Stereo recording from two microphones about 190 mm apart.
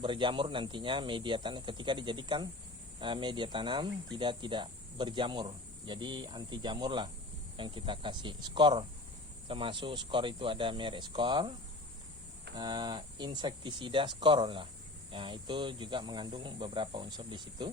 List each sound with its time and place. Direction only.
0.0 s speech: 25° right (ahead or behind)
12.5 s speech: 25° right (ahead or behind)